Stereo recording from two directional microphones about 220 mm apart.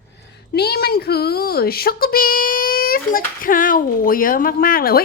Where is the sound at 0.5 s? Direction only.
45° left (ahead or behind).